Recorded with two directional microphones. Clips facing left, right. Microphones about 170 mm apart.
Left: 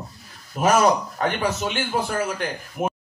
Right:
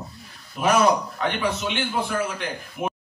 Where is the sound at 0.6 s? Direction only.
45° left (ahead or behind).